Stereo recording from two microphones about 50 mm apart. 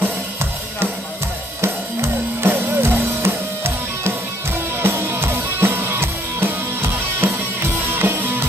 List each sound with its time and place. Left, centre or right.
1.6 s music: right
2.5 s music: right